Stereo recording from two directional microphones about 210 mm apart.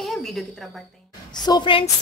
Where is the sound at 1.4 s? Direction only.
20° left (ahead or behind).